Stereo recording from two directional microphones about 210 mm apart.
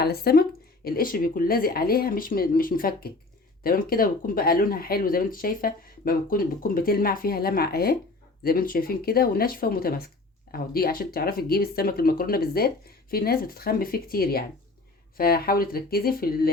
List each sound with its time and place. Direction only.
0.0 s speech: 50° left (ahead or behind)